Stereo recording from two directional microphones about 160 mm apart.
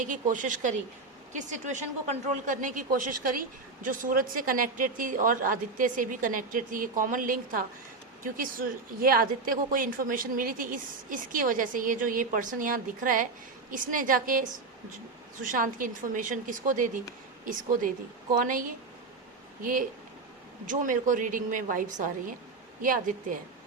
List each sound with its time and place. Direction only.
0.0 s speech: 55° right (ahead or behind)
15.4 s speech: 55° right (ahead or behind)
18.3 s speech: 55° right (ahead or behind)